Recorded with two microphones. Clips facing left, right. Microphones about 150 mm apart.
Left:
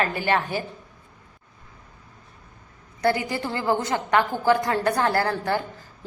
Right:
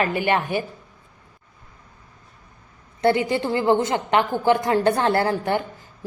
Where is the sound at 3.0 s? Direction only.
25° right (ahead or behind).